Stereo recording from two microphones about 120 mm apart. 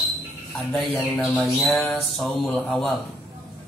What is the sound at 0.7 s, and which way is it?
Speech, 15° left (ahead or behind).